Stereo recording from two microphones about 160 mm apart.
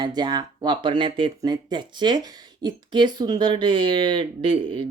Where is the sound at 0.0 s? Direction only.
25° right (ahead or behind).